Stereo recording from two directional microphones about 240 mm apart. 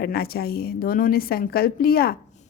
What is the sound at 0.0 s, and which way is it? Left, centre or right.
A woman's voice, left.